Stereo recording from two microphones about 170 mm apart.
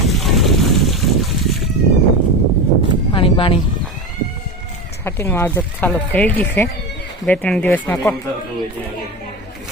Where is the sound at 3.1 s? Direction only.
30° left (ahead or behind).